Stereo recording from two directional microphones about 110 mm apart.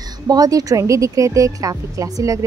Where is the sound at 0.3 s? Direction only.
35° right (ahead or behind).